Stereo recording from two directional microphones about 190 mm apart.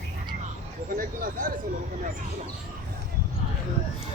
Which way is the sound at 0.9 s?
45° right (ahead or behind).